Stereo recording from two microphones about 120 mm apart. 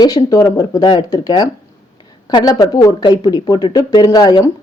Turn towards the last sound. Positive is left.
turn(degrees=35)  # may be behind; listen again after turning